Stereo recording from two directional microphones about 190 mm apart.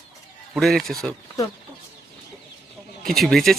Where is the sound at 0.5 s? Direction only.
Centre (ahead or behind).